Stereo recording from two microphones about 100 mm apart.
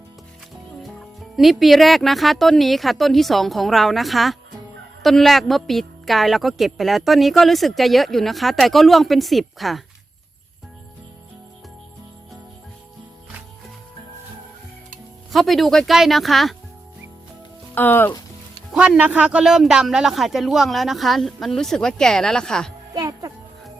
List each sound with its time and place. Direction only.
0.8 s a woman's voice: centre (ahead or behind)
15.3 s a woman's voice: centre (ahead or behind)
17.7 s speech: 20° left (ahead or behind)
18.7 s a woman's voice: 10° right (ahead or behind); by 22.7 s 5° left (ahead or behind)
23.0 s music: 35° right (ahead or behind)